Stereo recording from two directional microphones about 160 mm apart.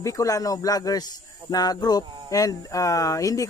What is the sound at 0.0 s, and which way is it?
Speech, 20° left (ahead or behind).